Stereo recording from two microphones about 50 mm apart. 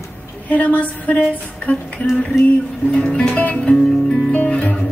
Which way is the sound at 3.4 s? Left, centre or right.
Left.